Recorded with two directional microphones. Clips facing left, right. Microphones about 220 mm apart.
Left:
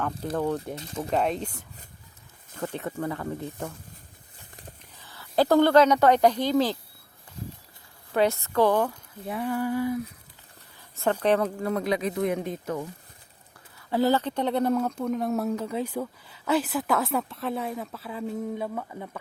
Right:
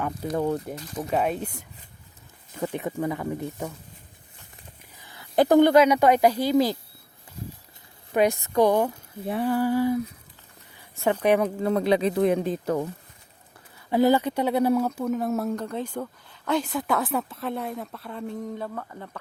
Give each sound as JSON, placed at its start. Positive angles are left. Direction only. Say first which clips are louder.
{"t": 0.3, "sound": "speech", "louder": "right 2 dB", "side_deg": -10}
{"t": 4.9, "sound": "speech", "louder": "right 2 dB", "side_deg": -15}
{"t": 8.1, "sound": "speech", "louder": "right 2 dB", "side_deg": -15}
{"t": 9.2, "sound": "speech", "louder": "right 4 dB", "side_deg": -30}
{"t": 10.9, "sound": "speech", "louder": "right 2 dB", "side_deg": -10}
{"t": 11.6, "sound": "speech", "louder": "right 5 dB", "side_deg": -30}
{"t": 13.9, "sound": "speech", "louder": "right 3 dB", "side_deg": -15}